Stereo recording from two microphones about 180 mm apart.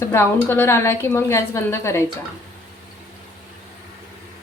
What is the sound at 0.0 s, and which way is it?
A woman's voice, 15° left (ahead or behind).